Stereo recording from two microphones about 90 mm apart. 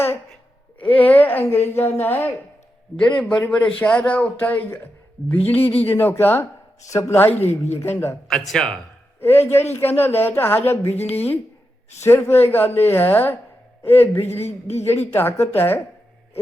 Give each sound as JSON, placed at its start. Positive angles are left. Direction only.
{"t": 0.8, "sound": "speech", "side_deg": 20}
{"t": 6.9, "sound": "speech", "side_deg": 35}
{"t": 8.3, "sound": "a man's voice", "side_deg": 5}
{"t": 9.2, "sound": "speech", "side_deg": 25}